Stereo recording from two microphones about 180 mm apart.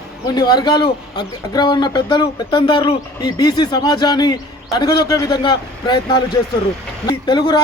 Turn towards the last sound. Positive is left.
turn(degrees=25)  # may be behind; listen again after turning